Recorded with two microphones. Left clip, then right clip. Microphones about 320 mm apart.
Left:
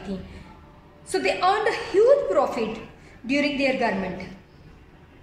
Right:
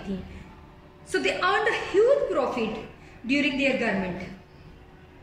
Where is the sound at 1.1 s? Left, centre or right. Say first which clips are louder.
Left 2 dB; centre.